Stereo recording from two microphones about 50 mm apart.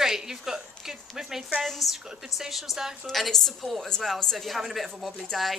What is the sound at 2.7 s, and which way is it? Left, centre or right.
A woman's voice, centre.